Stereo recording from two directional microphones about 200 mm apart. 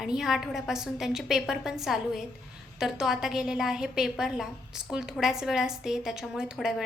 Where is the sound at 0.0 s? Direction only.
Centre (ahead or behind).